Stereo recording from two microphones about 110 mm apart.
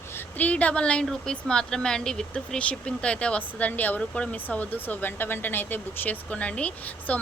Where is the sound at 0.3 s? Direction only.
15° left (ahead or behind).